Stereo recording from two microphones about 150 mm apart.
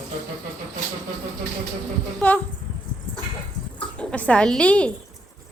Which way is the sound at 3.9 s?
10° left (ahead or behind).